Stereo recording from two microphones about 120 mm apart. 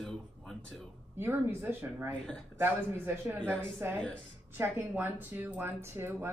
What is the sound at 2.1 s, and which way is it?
Speech, 5° left (ahead or behind).